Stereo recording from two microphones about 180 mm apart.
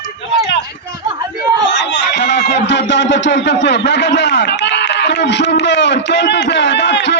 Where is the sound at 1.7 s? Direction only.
80° left.